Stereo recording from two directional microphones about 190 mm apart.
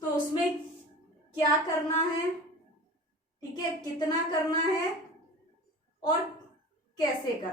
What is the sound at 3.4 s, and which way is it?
A woman's voice, 20° left (ahead or behind).